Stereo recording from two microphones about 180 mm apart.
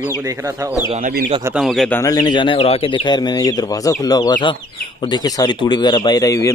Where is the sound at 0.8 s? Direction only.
40° right (ahead or behind).